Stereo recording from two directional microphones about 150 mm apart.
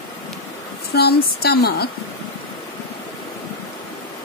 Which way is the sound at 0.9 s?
90° left.